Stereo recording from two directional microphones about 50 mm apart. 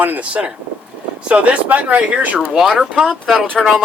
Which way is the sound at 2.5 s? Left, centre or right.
Centre.